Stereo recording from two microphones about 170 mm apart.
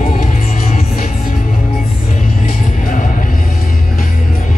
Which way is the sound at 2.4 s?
50° left (ahead or behind).